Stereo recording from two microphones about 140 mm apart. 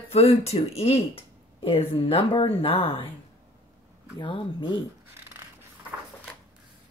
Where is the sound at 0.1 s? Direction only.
45° left (ahead or behind).